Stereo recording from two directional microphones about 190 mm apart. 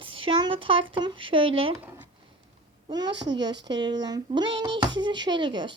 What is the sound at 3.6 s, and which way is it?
Speech, 25° right (ahead or behind).